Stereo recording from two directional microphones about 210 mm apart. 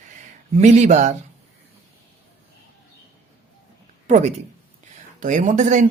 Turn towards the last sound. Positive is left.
turn(degrees=-35)  # may be behind; listen again after turning